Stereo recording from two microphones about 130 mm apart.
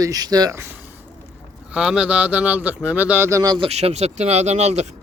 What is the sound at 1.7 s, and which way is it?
Speech, 5° right (ahead or behind).